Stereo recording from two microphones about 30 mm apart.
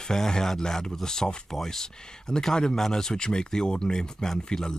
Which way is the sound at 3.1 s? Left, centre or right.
Left.